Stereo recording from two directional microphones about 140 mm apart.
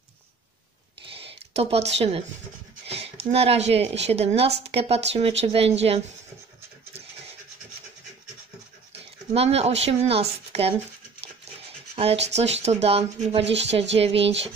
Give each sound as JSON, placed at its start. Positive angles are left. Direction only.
{"t": 1.1, "sound": "a sound", "side_deg": -45}
{"t": 2.9, "sound": "speech", "side_deg": -45}
{"t": 8.9, "sound": "speech", "side_deg": -45}
{"t": 11.9, "sound": "speech", "side_deg": -45}